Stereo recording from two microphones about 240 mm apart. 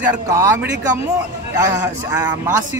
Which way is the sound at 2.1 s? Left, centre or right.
Centre.